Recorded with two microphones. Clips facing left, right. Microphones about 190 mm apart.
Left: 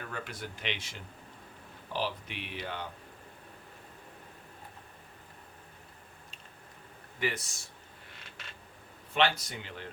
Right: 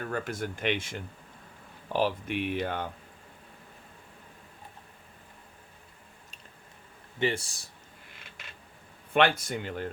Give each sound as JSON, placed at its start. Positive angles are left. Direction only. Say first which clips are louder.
{"t": 0.0, "sound": "speech", "louder": "right 8 dB", "side_deg": -45}
{"t": 7.2, "sound": "speech", "louder": "right 5 dB", "side_deg": -30}
{"t": 9.1, "sound": "speech", "louder": "right 5 dB", "side_deg": -55}